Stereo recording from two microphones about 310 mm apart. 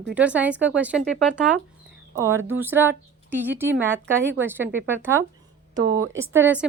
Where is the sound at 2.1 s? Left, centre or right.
Centre.